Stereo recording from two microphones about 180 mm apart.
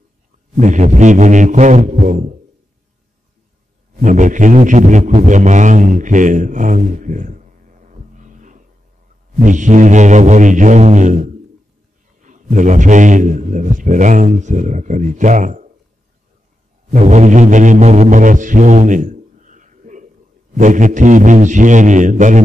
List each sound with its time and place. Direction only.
0.6 s a man's voice: 45° right (ahead or behind)
3.9 s a man's voice: 45° right (ahead or behind)
16.9 s mantra: 40° right (ahead or behind)
20.5 s a man's voice: 45° right (ahead or behind)